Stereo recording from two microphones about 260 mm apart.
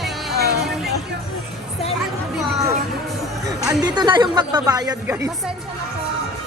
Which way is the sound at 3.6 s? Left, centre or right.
Centre.